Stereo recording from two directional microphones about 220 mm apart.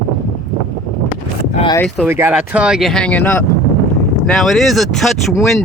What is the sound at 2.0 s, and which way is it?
Speech, 10° right (ahead or behind).